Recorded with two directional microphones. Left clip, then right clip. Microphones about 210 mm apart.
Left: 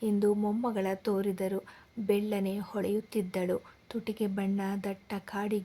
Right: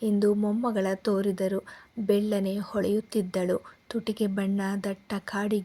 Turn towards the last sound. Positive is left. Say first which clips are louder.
# right 4 dB
turn(degrees=-15)  # may be behind; listen again after turning